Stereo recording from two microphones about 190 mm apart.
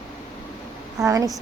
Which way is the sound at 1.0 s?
15° right (ahead or behind).